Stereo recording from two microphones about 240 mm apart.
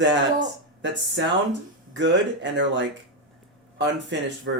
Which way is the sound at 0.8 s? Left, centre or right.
Right.